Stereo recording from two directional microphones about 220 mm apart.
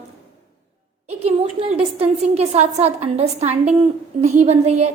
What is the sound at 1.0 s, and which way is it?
A woman's voice, 25° right (ahead or behind).